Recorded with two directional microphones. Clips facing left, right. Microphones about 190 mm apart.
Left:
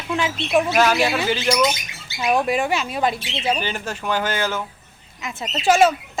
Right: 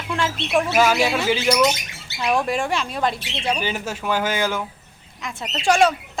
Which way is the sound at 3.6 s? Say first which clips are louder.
Right 1 dB; 10° right (ahead or behind).